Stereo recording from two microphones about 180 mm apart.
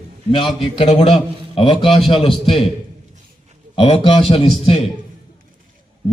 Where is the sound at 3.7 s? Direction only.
30° left (ahead or behind).